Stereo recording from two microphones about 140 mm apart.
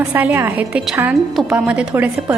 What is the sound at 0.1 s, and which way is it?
A woman's voice, 10° right (ahead or behind).